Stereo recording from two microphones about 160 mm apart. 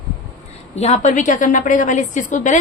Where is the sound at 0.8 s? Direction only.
45° left (ahead or behind).